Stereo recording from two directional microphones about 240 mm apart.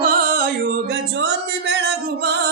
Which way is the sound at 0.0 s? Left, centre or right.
Right.